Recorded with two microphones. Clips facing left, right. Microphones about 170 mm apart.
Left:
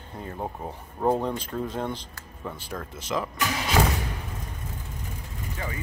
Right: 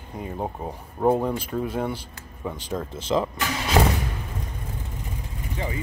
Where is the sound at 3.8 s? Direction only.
30° right (ahead or behind).